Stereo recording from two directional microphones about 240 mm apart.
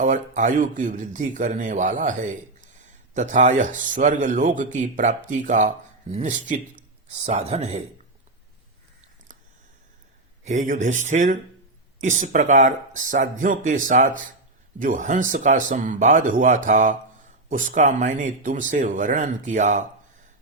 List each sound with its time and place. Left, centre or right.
0.0 s speech: right
10.4 s speech: right